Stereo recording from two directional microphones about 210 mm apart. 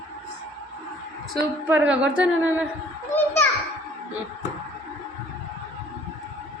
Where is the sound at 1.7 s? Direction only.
5° right (ahead or behind).